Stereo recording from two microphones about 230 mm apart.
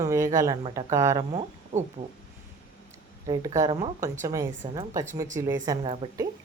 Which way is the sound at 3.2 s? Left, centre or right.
Centre.